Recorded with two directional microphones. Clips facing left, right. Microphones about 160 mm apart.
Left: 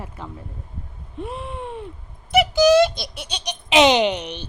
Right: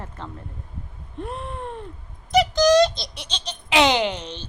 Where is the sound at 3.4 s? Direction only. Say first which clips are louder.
Left 3 dB; 15° left (ahead or behind).